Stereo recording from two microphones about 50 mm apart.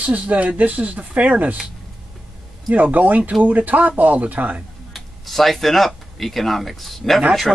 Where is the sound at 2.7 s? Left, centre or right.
Right.